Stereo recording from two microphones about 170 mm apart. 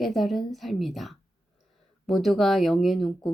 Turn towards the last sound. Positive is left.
turn(degrees=0)  # may be behind; listen again after turning